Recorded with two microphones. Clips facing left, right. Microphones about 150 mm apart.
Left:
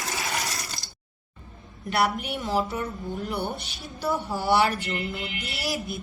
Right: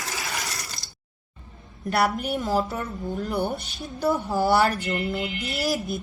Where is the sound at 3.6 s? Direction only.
45° right (ahead or behind).